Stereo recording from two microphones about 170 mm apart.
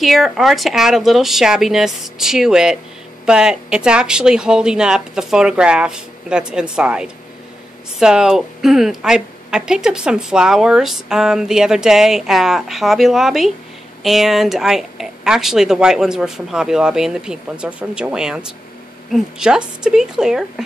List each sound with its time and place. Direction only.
0.0 s a woman's voice: centre (ahead or behind)